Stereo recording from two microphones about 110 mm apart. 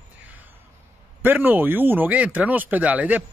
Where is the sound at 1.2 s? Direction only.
20° right (ahead or behind).